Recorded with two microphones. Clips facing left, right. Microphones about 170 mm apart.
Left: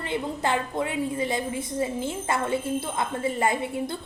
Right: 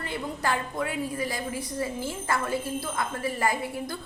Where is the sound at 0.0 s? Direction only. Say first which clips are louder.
Left 3 dB; 20° left (ahead or behind).